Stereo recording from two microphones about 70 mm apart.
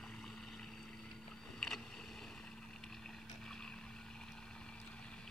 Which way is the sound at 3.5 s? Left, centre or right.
Centre.